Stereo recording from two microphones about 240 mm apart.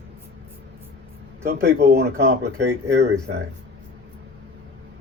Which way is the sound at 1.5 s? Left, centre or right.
Right.